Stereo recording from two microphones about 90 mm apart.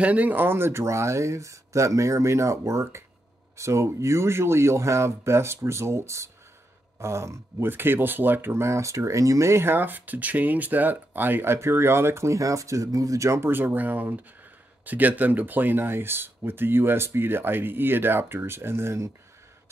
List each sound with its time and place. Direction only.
0.0 s speech: 15° right (ahead or behind); by 19.1 s 30° right (ahead or behind)